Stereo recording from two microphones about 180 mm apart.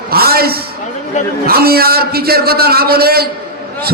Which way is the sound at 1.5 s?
60° right (ahead or behind).